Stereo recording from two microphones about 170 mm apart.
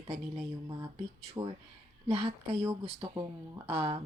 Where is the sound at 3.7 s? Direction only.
35° right (ahead or behind).